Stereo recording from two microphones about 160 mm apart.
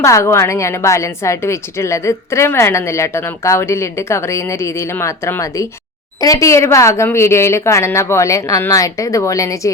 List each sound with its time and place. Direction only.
0.0 s a woman's voice: 20° left (ahead or behind)